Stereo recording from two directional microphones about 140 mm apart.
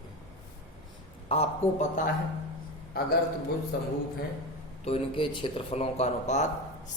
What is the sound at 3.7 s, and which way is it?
Speech, 90° left.